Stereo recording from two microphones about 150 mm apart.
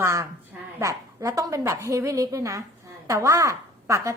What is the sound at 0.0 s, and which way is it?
A woman's voice, 20° right (ahead or behind).